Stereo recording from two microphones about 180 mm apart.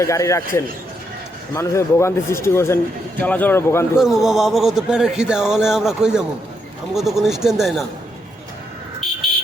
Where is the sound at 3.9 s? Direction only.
Centre (ahead or behind).